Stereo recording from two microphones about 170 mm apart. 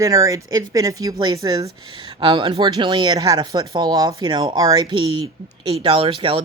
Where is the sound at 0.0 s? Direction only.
20° right (ahead or behind).